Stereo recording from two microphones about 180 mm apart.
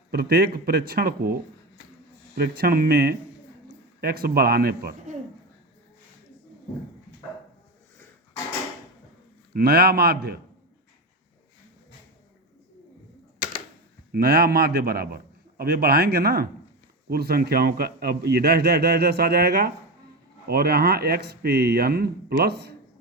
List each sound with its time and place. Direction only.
0.1 s a man's voice: 60° right (ahead or behind)
9.5 s a man's voice: 60° right (ahead or behind)
14.1 s a man's voice: 60° right (ahead or behind)